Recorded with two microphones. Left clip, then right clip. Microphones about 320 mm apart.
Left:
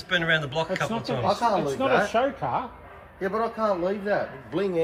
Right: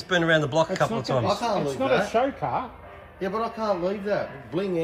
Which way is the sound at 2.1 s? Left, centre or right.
Left.